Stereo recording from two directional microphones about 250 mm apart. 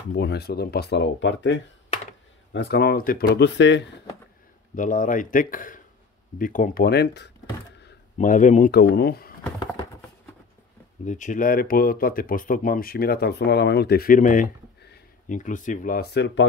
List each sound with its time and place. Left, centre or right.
0.1 s speech: left
4.7 s speech: left
11.1 s speech: left